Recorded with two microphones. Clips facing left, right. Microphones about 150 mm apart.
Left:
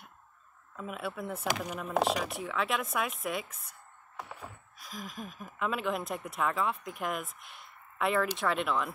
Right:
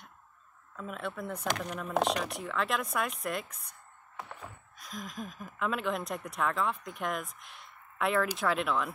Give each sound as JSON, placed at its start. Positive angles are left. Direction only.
{"t": 0.7, "sound": "speech", "side_deg": 5}